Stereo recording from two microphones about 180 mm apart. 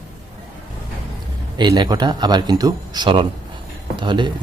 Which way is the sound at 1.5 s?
25° right (ahead or behind).